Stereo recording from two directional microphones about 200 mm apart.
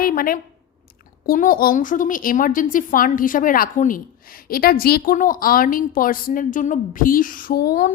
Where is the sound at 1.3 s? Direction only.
45° left (ahead or behind).